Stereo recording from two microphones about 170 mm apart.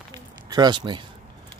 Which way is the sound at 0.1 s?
25° right (ahead or behind).